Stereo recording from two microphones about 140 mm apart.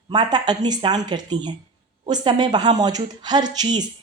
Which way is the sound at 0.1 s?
30° right (ahead or behind).